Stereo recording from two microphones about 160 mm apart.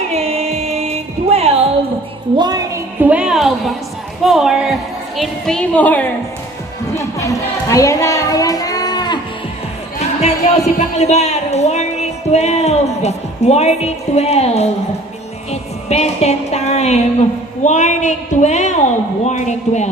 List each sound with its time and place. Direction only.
0.1 s music: 40° right (ahead or behind)
2.3 s a woman's voice: 25° right (ahead or behind)
3.0 s a woman's voice: 10° right (ahead or behind); by 6.1 s 10° left (ahead or behind)
6.9 s a sound: 20° left (ahead or behind)
10.0 s a sound: 40° left (ahead or behind)
10.9 s speech: 45° left (ahead or behind)
15.9 s a woman's voice: 40° left (ahead or behind)